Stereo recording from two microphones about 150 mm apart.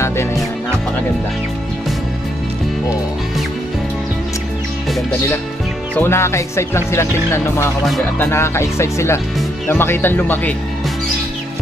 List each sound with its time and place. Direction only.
5.9 s speech: 15° left (ahead or behind)